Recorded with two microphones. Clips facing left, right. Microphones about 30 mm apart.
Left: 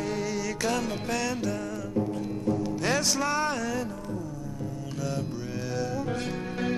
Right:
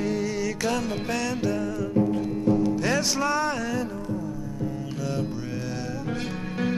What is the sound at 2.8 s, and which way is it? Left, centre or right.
Music, centre.